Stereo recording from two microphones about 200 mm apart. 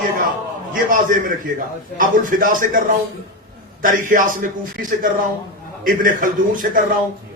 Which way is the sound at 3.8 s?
40° right (ahead or behind).